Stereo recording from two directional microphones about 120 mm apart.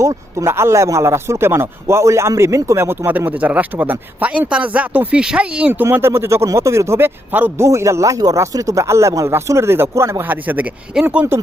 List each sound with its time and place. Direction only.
0.0 s speech: 25° right (ahead or behind)